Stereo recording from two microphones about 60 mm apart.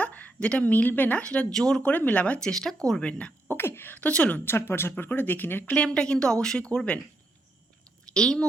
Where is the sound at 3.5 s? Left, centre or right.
Left.